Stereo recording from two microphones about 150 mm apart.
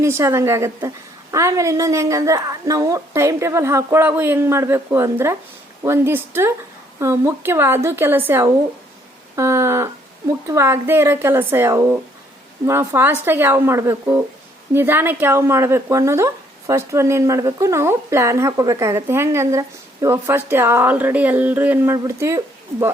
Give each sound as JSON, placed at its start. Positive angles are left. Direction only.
{"t": 0.0, "sound": "a woman's voice", "side_deg": -20}